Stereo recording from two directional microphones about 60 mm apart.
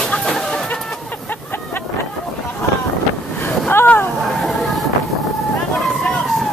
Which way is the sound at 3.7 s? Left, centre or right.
Left.